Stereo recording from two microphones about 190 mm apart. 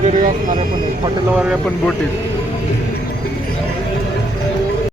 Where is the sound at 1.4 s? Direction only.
5° right (ahead or behind).